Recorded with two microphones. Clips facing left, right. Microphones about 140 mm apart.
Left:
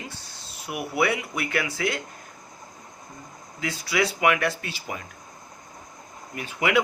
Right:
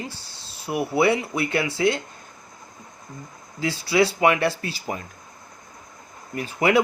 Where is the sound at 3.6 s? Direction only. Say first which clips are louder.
Right 5 dB; 30° right (ahead or behind).